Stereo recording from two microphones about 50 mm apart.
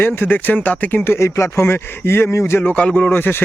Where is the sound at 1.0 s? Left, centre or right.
Left.